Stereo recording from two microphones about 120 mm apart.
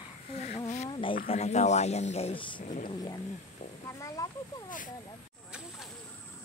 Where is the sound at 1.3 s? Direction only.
70° left (ahead or behind).